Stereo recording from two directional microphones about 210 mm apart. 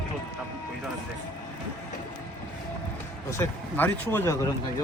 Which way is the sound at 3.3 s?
10° left (ahead or behind).